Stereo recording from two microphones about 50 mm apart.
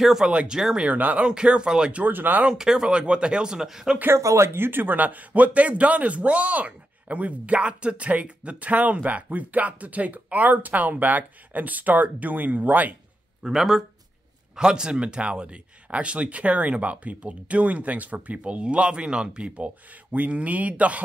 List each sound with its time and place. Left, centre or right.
0.0 s speech: centre
0.3 s speech: right
0.9 s a man's voice: right
1.2 s speech: centre
2.0 s a man's voice: right
2.5 s speech: centre
4.1 s speech: right
4.6 s a man's voice: right
13.4 s speech: centre; by 21.0 s right